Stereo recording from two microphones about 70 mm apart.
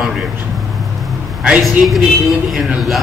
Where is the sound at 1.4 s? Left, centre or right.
Centre.